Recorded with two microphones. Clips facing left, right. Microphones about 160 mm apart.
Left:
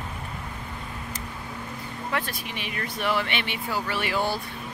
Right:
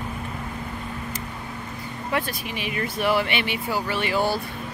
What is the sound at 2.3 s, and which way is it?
Speech, 5° right (ahead or behind).